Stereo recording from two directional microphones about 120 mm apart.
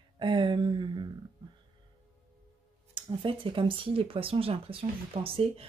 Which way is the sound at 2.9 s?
45° right (ahead or behind).